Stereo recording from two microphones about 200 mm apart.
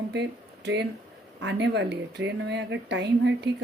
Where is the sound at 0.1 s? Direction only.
60° right (ahead or behind).